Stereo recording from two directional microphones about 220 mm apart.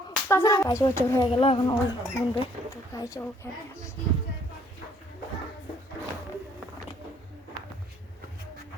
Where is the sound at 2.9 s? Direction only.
15° left (ahead or behind).